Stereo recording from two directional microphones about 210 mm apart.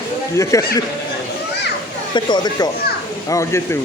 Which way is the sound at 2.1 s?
20° left (ahead or behind).